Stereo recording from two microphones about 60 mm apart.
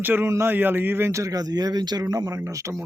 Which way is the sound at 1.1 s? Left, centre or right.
Right.